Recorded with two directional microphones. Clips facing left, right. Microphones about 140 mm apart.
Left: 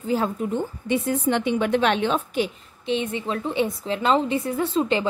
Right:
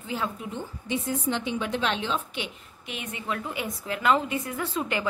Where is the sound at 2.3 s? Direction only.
35° left (ahead or behind).